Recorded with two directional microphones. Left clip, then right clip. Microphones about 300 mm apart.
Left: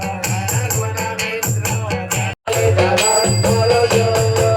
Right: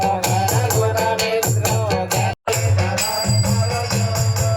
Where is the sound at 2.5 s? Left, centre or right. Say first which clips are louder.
Left 12 dB; left.